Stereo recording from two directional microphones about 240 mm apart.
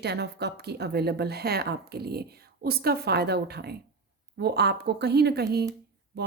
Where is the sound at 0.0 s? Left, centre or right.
Right.